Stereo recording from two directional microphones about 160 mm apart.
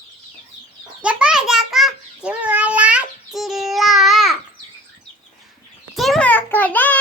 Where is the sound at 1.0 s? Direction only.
5° right (ahead or behind).